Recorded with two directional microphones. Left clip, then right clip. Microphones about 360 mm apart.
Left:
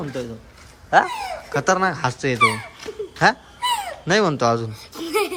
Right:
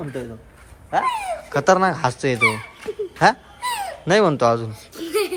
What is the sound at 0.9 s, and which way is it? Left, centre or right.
Speech, left.